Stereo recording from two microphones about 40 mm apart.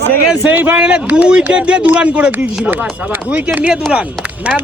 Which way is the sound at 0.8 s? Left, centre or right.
Right.